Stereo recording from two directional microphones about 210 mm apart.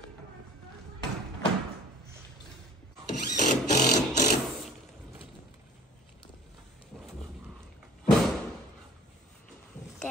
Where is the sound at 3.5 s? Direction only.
35° left (ahead or behind).